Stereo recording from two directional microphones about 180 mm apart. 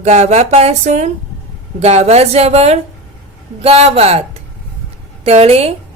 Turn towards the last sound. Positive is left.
turn(degrees=-35)  # may be behind; listen again after turning